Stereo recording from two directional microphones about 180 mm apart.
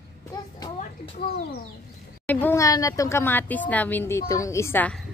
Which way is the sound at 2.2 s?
10° left (ahead or behind).